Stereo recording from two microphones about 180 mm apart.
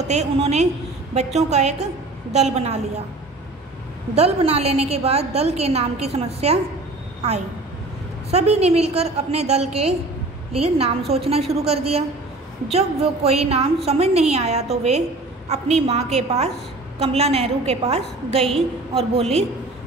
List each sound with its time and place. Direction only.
0.1 s a woman's voice: 35° right (ahead or behind)
4.1 s a woman's voice: 35° right (ahead or behind)
8.3 s a woman's voice: 35° right (ahead or behind)